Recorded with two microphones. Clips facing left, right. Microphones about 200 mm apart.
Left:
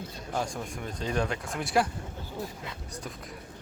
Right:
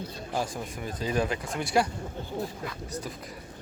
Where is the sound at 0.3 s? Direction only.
5° right (ahead or behind).